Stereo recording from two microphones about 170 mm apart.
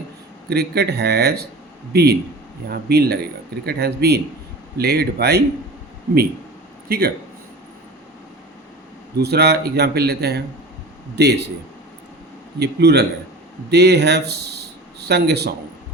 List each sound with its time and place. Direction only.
0.5 s speech: 70° right (ahead or behind)
6.8 s speech: 60° right (ahead or behind)
9.2 s speech: 75° right (ahead or behind)
12.5 s speech: 75° right (ahead or behind)